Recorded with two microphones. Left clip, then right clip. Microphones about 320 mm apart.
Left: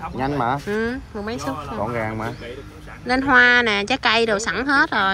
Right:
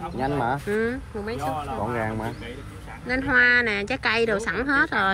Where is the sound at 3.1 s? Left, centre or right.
Centre.